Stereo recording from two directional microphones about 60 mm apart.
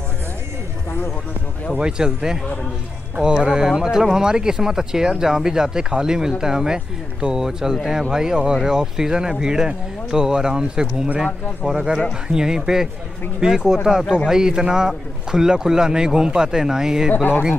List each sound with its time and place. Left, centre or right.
1.8 s speech: centre
17.1 s speech: left